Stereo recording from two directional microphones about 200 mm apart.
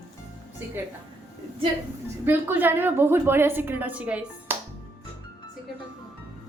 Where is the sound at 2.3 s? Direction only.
10° right (ahead or behind).